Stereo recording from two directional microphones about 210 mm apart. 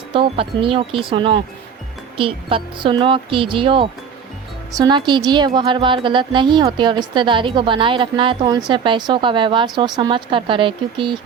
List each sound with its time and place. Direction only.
0.1 s a woman's voice: 25° right (ahead or behind)